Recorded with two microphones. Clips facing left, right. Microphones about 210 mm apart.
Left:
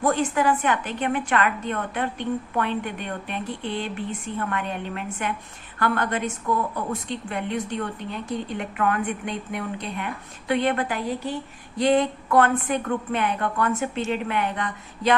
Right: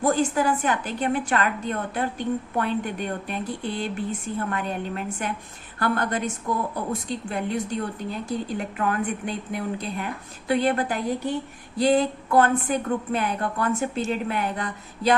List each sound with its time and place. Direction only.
0.0 s speech: 35° right (ahead or behind)